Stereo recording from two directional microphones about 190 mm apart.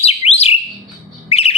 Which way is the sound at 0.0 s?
30° left (ahead or behind).